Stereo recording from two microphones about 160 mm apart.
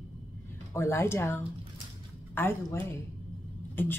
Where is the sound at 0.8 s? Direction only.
15° left (ahead or behind).